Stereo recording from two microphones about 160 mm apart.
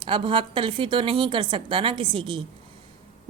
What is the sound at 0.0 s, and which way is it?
Speech, 30° right (ahead or behind).